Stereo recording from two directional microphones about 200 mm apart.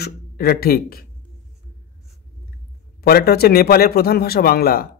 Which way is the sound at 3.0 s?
50° left (ahead or behind).